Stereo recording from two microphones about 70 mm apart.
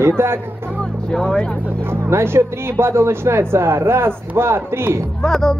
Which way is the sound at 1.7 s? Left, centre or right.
Right.